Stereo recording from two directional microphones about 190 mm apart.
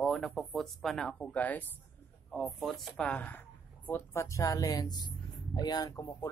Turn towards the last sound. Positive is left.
turn(degrees=20)  # may be behind; listen again after turning